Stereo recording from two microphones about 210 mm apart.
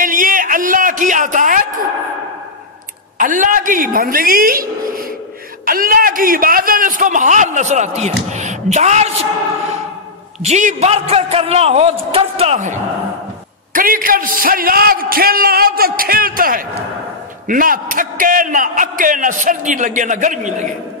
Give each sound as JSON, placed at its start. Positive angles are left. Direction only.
{"t": 0.0, "sound": "a sound", "side_deg": -40}
{"t": 3.2, "sound": "a man's voice", "side_deg": -40}
{"t": 5.7, "sound": "a man's voice", "side_deg": -45}
{"t": 10.4, "sound": "a man's voice", "side_deg": -35}
{"t": 13.7, "sound": "a man's voice", "side_deg": -40}